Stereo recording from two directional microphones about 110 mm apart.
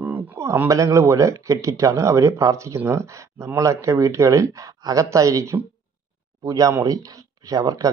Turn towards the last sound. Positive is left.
turn(degrees=-35)  # may be behind; listen again after turning